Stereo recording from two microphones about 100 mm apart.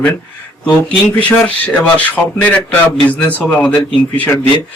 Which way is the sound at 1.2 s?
15° left (ahead or behind).